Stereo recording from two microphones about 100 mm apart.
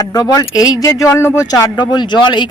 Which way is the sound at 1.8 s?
45° left (ahead or behind).